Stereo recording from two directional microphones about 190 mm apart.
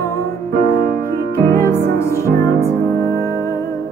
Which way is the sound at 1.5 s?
15° left (ahead or behind).